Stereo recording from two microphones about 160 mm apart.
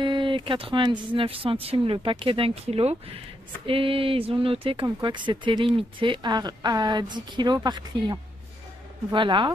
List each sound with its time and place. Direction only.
0.0 s speech: 30° right (ahead or behind)